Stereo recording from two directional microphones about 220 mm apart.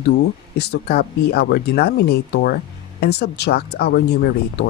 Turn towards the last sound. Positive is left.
turn(degrees=45)  # may be behind; listen again after turning